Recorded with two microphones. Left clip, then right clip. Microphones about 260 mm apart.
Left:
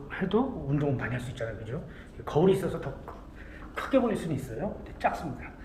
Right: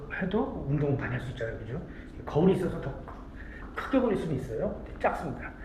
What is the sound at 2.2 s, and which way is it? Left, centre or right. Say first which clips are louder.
A woman's voice: left 2 dB; centre.